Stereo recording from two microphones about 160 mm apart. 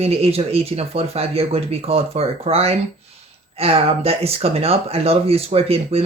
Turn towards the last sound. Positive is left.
turn(degrees=-40)  # may be behind; listen again after turning